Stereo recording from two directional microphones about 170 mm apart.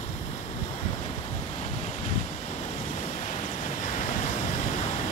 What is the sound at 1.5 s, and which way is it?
Waves, 45° left (ahead or behind).